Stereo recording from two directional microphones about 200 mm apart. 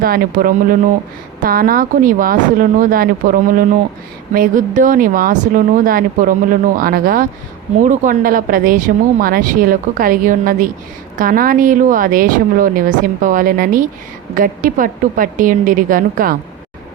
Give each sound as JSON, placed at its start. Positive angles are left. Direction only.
{"t": 0.0, "sound": "speech", "side_deg": -45}